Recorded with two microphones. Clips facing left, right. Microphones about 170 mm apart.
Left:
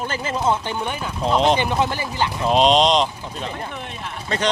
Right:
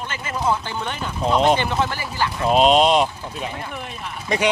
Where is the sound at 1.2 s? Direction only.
5° right (ahead or behind).